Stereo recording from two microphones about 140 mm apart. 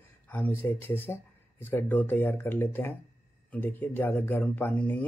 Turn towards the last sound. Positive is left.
turn(degrees=10)  # may be behind; listen again after turning